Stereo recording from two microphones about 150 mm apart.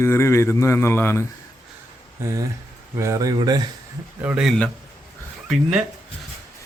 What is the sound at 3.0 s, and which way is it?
Speech, 20° right (ahead or behind).